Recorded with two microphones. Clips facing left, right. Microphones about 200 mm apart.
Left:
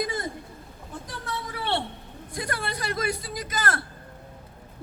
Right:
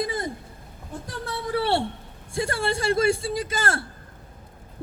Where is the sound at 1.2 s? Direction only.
30° right (ahead or behind).